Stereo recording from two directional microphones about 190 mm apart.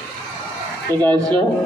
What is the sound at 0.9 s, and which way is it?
Speech, 15° left (ahead or behind).